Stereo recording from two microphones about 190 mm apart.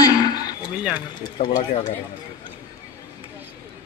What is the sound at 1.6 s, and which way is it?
Speech, 40° left (ahead or behind).